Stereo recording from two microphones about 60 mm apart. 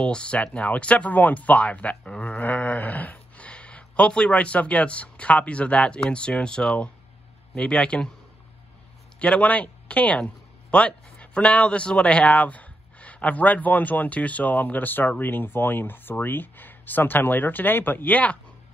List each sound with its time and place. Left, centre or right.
0.0 s a man's voice: centre
9.2 s speech: left